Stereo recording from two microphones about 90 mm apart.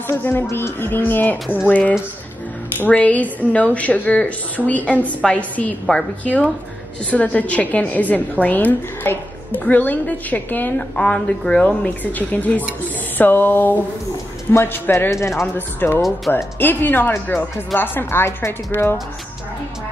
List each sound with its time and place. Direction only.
0.2 s a woman's voice: 25° left (ahead or behind)